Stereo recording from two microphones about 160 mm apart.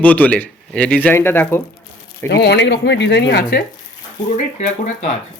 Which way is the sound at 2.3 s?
90° left.